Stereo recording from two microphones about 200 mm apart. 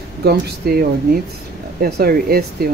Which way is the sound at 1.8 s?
50° right (ahead or behind).